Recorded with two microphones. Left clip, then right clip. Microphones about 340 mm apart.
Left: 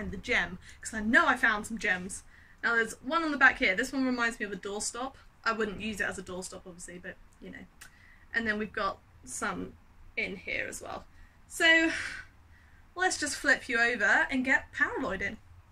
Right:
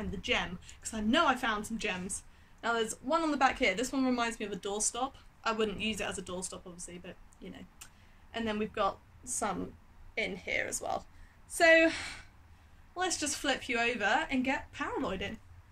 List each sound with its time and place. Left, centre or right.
0.1 s a woman's voice: centre
10.1 s a woman's voice: centre